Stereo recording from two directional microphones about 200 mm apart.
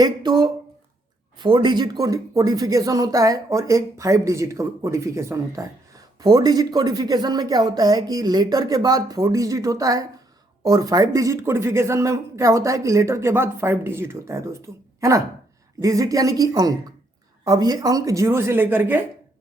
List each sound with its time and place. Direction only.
0.0 s speech: 20° right (ahead or behind)